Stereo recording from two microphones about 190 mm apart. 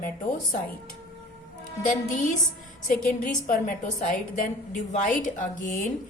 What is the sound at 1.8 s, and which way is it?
A woman's voice, 40° left (ahead or behind).